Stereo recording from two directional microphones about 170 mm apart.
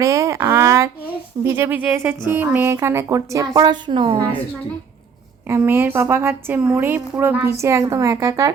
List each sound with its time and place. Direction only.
0.0 s a woman's voice: 20° right (ahead or behind)
5.5 s a woman's voice: 15° right (ahead or behind)